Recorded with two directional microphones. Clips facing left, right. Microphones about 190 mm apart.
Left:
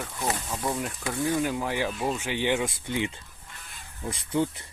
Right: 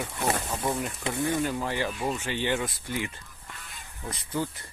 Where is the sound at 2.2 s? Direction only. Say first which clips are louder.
Left 2 dB; 15° left (ahead or behind).